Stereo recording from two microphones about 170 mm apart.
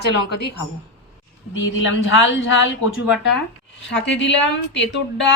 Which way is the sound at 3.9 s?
90° left.